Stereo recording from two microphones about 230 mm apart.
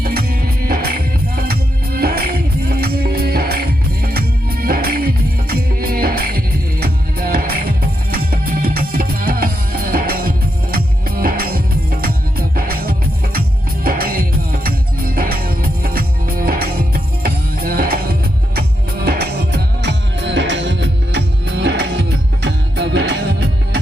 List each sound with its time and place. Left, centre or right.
0.0 s music: right